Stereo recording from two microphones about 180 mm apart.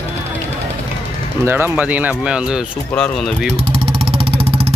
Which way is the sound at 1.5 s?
10° right (ahead or behind).